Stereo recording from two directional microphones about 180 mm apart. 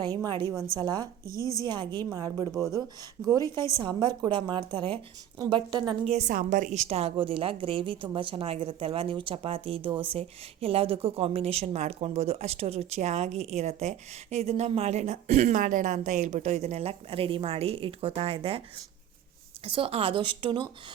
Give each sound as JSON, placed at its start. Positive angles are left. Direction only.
{"t": 0.0, "sound": "a woman's voice", "side_deg": -20}
{"t": 1.4, "sound": "a woman's voice", "side_deg": 20}
{"t": 1.6, "sound": "a woman's voice", "side_deg": -25}
{"t": 6.1, "sound": "a woman's voice", "side_deg": -40}
{"t": 19.6, "sound": "a woman's voice", "side_deg": -30}